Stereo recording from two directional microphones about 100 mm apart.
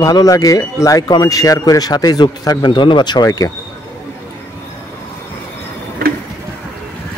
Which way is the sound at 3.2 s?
35° left (ahead or behind).